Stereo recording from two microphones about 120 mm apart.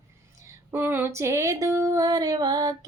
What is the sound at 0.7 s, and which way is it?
Speech, 20° right (ahead or behind).